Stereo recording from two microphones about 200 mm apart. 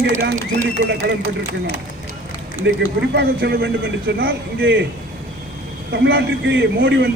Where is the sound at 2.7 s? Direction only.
60° right (ahead or behind).